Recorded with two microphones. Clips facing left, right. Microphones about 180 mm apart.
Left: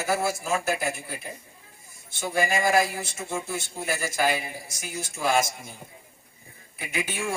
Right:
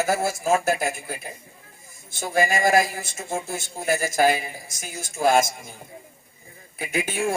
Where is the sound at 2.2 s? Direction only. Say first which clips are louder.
Right 3 dB; 45° right (ahead or behind).